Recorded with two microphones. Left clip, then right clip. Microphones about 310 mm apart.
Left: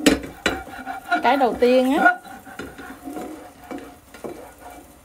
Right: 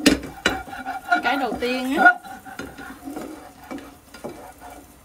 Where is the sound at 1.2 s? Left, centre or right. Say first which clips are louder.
Left 6 dB; left.